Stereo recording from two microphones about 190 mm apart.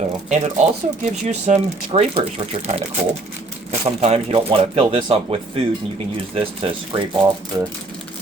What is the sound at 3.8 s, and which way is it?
Speech, 30° right (ahead or behind).